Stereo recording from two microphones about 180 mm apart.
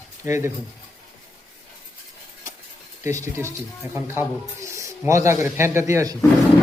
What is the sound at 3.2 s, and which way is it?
Speech, 15° right (ahead or behind).